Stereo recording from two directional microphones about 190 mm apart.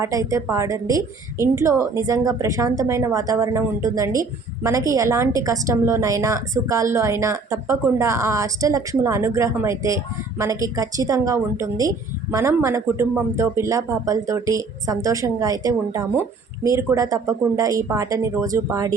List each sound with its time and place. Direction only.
0.0 s a woman's voice: 15° right (ahead or behind)